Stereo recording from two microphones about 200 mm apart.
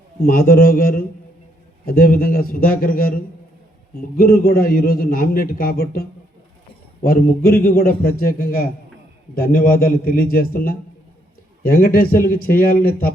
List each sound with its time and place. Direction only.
0.2 s a man's voice: 45° left (ahead or behind)